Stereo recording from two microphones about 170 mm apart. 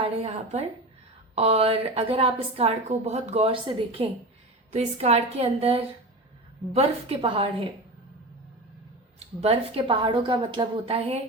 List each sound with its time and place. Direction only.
0.0 s a woman's voice: 35° right (ahead or behind)
9.1 s a woman's voice: 35° right (ahead or behind)